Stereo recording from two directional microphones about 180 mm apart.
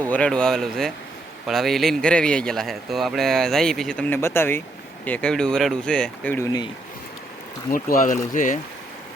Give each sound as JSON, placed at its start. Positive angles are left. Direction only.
{"t": 0.0, "sound": "speech", "side_deg": 5}
{"t": 7.7, "sound": "speech", "side_deg": 50}